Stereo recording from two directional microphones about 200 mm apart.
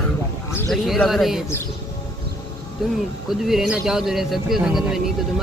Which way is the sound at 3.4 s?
Centre (ahead or behind).